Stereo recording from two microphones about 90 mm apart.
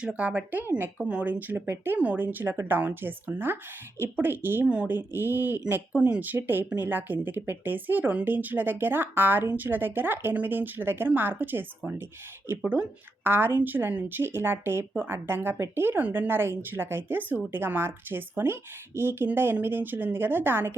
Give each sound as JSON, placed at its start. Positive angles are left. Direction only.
{"t": 0.0, "sound": "a woman's voice", "side_deg": -15}